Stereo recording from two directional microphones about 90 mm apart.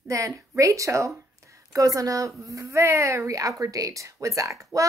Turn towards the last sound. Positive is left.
turn(degrees=-35)  # may be behind; listen again after turning